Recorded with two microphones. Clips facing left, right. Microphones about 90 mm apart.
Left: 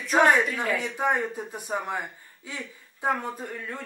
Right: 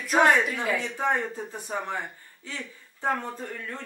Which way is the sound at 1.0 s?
15° left (ahead or behind).